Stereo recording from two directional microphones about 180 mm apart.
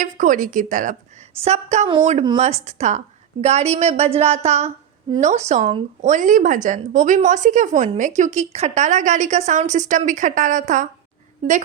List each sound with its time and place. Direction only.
0.0 s a woman's voice: 45° right (ahead or behind)